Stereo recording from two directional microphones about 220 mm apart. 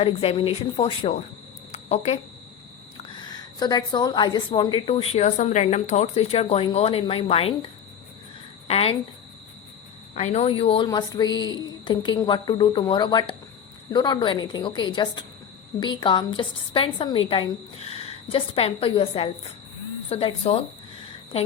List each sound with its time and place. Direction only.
0.0 s a woman's voice: 25° left (ahead or behind)
1.7 s a sound: 30° left (ahead or behind)
3.0 s a woman's voice: 20° left (ahead or behind)
10.2 s a woman's voice: 30° left (ahead or behind)